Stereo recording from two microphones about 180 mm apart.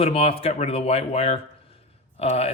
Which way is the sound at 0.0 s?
35° left (ahead or behind).